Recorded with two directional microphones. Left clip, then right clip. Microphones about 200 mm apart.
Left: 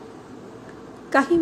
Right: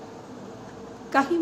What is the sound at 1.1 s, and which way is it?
Speech, 20° left (ahead or behind).